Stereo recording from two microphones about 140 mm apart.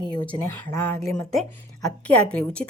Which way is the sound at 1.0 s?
Centre (ahead or behind).